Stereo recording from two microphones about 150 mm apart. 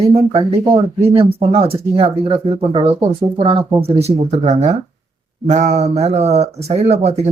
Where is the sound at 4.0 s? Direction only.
45° right (ahead or behind).